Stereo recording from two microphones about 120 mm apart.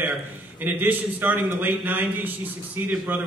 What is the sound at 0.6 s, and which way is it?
A man's voice, 15° right (ahead or behind).